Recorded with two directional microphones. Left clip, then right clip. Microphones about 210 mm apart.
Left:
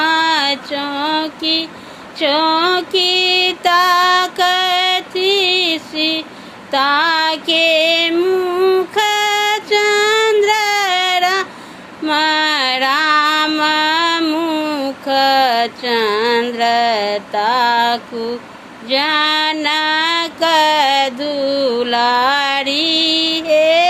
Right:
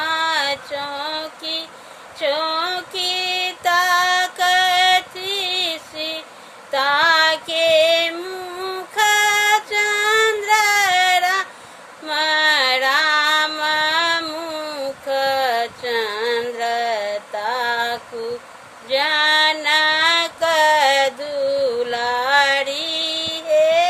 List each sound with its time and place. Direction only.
0.0 s female singing: 20° right (ahead or behind)